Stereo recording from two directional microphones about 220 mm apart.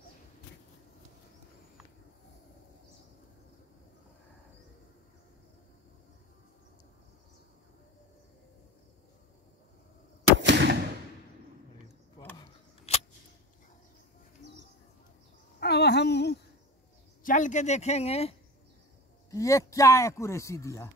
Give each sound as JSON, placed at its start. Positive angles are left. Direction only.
{"t": 10.3, "sound": "gunshot", "side_deg": -55}
{"t": 12.4, "sound": "keys jangling", "side_deg": 30}
{"t": 15.6, "sound": "a sound", "side_deg": 50}
{"t": 17.2, "sound": "speech", "side_deg": 35}
{"t": 19.3, "sound": "speech", "side_deg": 15}